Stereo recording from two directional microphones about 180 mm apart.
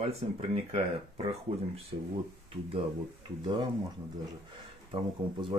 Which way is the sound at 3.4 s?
25° right (ahead or behind).